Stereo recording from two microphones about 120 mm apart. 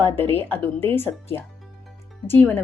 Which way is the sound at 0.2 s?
15° left (ahead or behind).